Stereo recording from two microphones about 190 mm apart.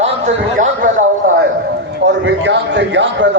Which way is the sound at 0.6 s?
45° right (ahead or behind).